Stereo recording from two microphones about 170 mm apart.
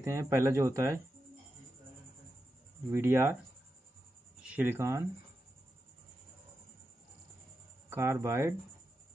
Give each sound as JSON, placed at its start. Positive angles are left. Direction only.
{"t": 0.0, "sound": "speech", "side_deg": -15}
{"t": 2.9, "sound": "speech", "side_deg": -15}
{"t": 4.4, "sound": "speech", "side_deg": -10}
{"t": 7.9, "sound": "speech", "side_deg": -15}